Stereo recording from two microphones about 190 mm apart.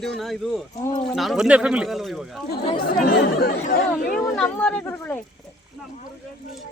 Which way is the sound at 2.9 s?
50° left (ahead or behind).